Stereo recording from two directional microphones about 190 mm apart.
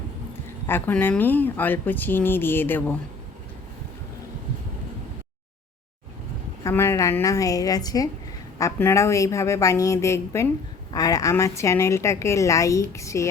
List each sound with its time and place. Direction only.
0.4 s speech: 10° left (ahead or behind)
6.7 s speech: 15° left (ahead or behind)